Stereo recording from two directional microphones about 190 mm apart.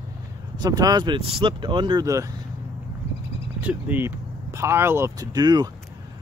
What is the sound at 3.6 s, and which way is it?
Speech, 10° right (ahead or behind).